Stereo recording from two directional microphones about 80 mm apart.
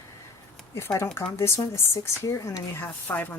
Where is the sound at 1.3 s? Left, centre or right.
Left.